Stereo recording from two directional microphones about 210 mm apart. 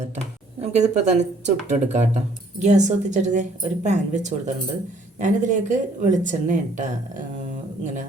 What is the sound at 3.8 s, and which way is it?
Speech, 35° right (ahead or behind).